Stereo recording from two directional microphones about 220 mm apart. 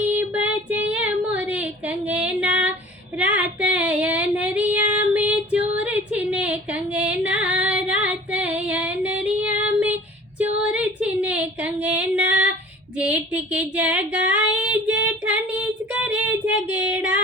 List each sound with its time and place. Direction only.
0.2 s female singing: 5° right (ahead or behind)
10.3 s a sound: 5° right (ahead or behind)
14.5 s child singing: 5° right (ahead or behind)